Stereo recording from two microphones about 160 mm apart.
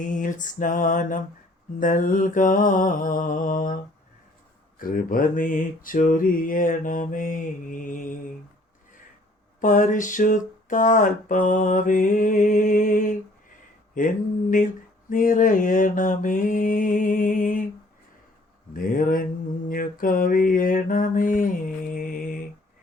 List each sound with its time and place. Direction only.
0.0 s a sound: 55° left (ahead or behind)
1.8 s mantra: 55° left (ahead or behind)
4.8 s mantra: 60° left (ahead or behind)
9.6 s a sound: 55° left (ahead or behind)
15.1 s mantra: 55° left (ahead or behind)
18.7 s mantra: 60° left (ahead or behind)